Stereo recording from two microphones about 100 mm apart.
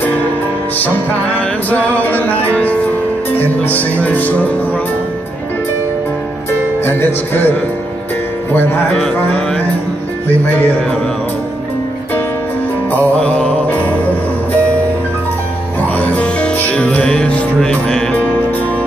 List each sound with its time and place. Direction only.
1.3 s music: 15° left (ahead or behind)
3.3 s speech: 15° left (ahead or behind)
6.8 s music: 20° left (ahead or behind)
8.9 s music: 5° left (ahead or behind)
12.9 s music: 15° left (ahead or behind)
16.0 s music: 10° left (ahead or behind)